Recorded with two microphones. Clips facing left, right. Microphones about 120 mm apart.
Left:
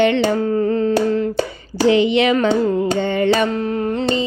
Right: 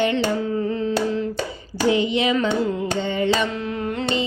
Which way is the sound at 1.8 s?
80° left.